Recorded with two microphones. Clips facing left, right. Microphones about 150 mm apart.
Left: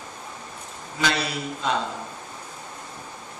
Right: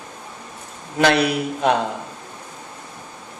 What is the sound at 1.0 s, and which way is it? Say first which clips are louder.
Speech: right 9 dB; 65° right (ahead or behind).